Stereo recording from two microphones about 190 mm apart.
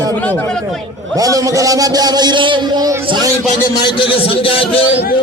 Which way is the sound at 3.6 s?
25° left (ahead or behind).